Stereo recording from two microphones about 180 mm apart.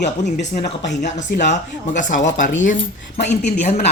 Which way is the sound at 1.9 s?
45° left (ahead or behind).